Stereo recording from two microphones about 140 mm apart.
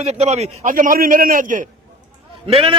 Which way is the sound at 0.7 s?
80° right.